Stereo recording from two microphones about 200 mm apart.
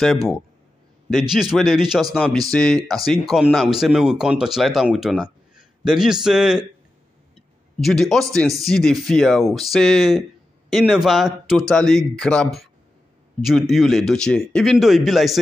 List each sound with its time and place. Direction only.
0.0 s speech: centre (ahead or behind)
1.5 s speech: centre (ahead or behind)
7.8 s speech: centre (ahead or behind)